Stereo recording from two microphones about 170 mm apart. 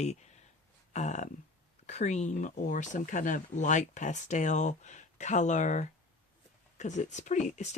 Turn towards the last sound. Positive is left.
turn(degrees=45)  # may be behind; listen again after turning